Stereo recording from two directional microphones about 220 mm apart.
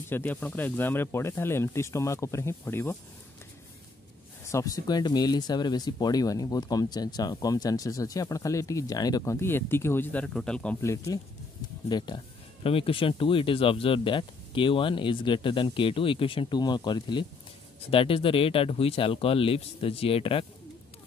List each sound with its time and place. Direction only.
0.1 s speech: 10° left (ahead or behind)
4.5 s speech: 15° left (ahead or behind)